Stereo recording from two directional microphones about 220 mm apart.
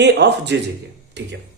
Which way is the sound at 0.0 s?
50° right (ahead or behind).